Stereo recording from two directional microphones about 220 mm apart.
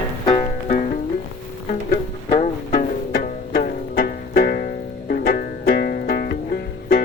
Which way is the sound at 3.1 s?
45° left (ahead or behind).